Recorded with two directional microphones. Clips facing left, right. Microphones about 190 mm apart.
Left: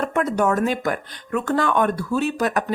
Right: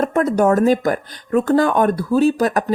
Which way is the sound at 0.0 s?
35° right (ahead or behind).